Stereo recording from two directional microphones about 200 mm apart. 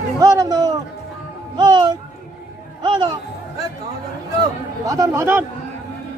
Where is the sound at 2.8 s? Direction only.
25° right (ahead or behind).